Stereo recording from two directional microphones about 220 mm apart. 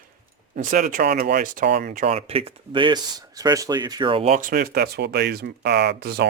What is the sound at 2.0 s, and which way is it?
Speech, 25° right (ahead or behind).